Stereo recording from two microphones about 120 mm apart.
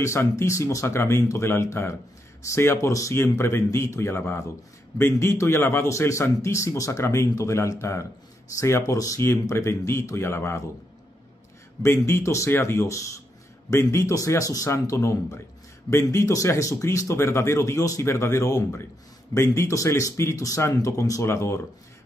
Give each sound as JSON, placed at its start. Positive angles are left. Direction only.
{"t": 0.0, "sound": "a man's voice", "side_deg": 25}
{"t": 11.8, "sound": "a man's voice", "side_deg": 25}